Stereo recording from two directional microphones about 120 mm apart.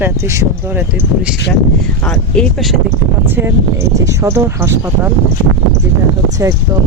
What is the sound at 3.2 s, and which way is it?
Speech, 20° right (ahead or behind).